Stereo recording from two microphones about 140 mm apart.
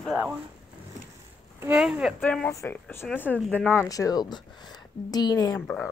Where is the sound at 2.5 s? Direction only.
20° left (ahead or behind).